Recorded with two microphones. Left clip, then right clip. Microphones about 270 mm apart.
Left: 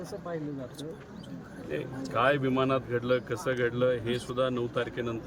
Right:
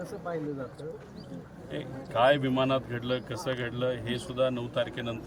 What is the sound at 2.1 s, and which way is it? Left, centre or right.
A man's voice, centre.